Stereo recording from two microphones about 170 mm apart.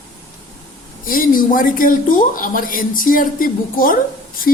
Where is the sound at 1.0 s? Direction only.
55° left (ahead or behind).